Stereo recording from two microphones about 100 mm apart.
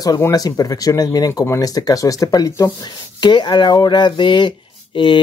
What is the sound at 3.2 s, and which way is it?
Speech, 50° left (ahead or behind).